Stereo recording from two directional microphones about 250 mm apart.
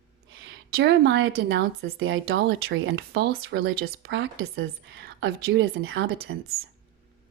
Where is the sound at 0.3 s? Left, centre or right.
Right.